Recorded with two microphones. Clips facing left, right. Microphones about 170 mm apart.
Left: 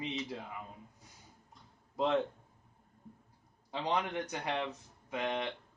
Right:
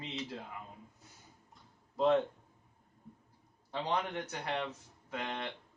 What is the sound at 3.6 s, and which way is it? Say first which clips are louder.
Speech: left 1 dB; 15° left (ahead or behind).